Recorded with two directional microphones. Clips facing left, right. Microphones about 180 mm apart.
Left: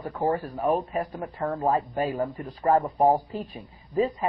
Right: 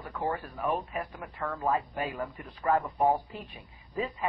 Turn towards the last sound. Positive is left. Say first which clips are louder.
# left 9 dB
turn(degrees=35)  # may be behind; listen again after turning